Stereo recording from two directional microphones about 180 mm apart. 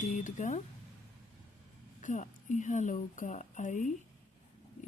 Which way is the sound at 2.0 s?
45° left (ahead or behind).